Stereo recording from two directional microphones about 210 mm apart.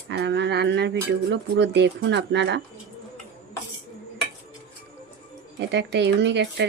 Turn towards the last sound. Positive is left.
turn(degrees=-55)  # may be behind; listen again after turning